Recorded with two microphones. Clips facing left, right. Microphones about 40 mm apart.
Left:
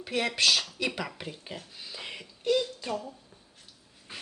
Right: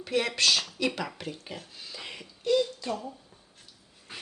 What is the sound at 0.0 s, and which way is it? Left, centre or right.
Speech, centre.